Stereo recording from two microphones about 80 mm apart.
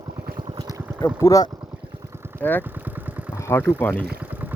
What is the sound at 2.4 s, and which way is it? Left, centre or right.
Speech, centre.